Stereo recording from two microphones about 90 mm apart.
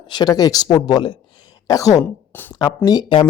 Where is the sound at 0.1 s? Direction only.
50° left (ahead or behind).